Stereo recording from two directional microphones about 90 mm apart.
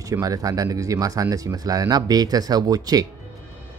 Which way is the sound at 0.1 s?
40° right (ahead or behind).